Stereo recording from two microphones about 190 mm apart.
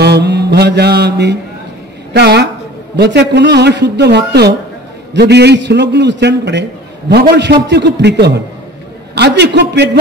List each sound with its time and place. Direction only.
0.0 s mantra: 60° right (ahead or behind)
2.1 s a man's voice: 60° right (ahead or behind)